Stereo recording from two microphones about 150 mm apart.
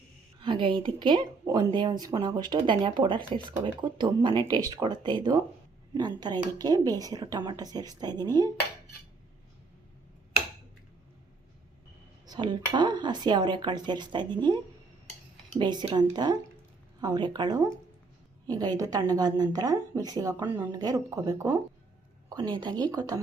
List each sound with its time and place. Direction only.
0.4 s a woman's voice: 35° right (ahead or behind)
12.2 s speech: 30° right (ahead or behind)